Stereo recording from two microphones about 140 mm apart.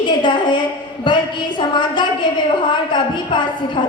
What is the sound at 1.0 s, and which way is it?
A woman's voice, 35° left (ahead or behind).